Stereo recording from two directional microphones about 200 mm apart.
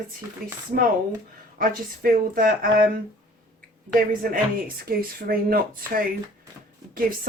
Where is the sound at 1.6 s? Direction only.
45° right (ahead or behind).